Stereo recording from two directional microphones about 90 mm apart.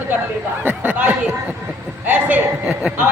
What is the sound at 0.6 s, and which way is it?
Speech, 20° right (ahead or behind).